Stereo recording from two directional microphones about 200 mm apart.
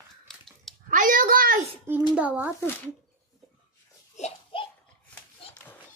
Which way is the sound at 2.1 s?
5° right (ahead or behind).